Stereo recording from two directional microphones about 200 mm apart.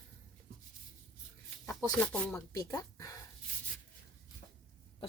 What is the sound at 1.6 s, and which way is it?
Speech, 10° left (ahead or behind).